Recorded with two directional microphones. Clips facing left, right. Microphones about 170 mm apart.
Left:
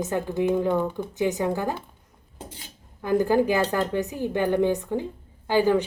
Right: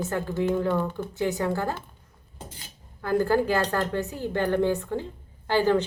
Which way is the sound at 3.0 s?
15° left (ahead or behind).